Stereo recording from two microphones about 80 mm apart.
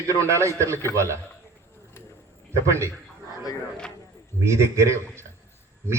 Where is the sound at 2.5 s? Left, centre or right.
Right.